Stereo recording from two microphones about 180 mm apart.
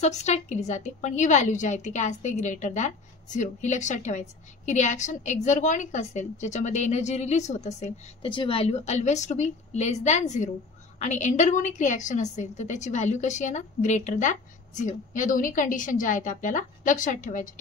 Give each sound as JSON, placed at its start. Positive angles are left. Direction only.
{"t": 0.0, "sound": "a woman's voice", "side_deg": 40}